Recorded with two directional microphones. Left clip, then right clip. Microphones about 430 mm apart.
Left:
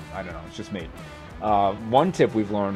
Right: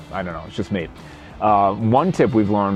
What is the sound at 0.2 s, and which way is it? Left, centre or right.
Speech, right.